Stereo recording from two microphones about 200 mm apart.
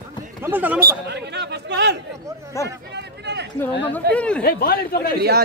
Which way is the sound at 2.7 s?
60° right (ahead or behind).